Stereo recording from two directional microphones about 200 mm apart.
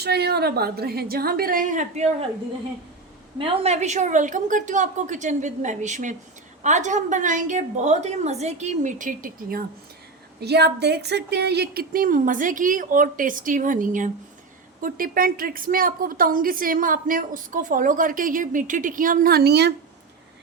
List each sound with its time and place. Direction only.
0.0 s a woman's voice: 55° right (ahead or behind)
3.3 s a woman's voice: 30° right (ahead or behind); by 19.7 s 55° right (ahead or behind)